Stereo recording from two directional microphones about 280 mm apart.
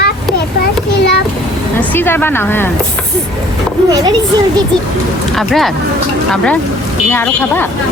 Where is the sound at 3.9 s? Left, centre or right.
Centre.